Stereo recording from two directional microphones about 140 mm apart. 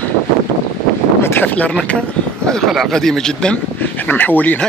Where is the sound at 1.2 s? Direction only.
15° left (ahead or behind).